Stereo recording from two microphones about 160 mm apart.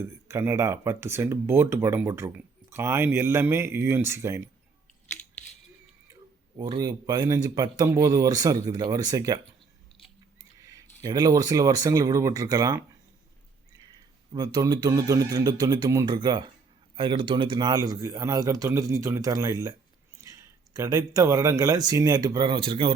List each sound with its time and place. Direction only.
0.0 s speech: 15° right (ahead or behind)
6.6 s speech: 25° right (ahead or behind)
10.6 s speech: 20° right (ahead or behind)
14.3 s speech: 25° right (ahead or behind)